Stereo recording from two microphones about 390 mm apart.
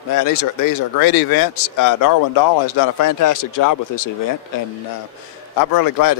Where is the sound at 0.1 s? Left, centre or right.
Left.